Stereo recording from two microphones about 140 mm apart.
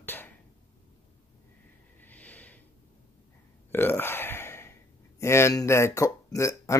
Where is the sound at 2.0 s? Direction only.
10° left (ahead or behind).